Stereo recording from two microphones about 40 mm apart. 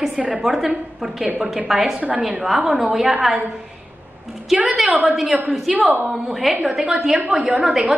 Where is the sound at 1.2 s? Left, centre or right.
Right.